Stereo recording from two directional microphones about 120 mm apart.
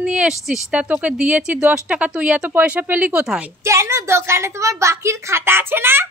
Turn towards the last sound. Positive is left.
turn(degrees=-20)  # may be behind; listen again after turning